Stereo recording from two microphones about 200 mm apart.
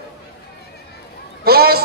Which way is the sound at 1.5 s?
50° right (ahead or behind).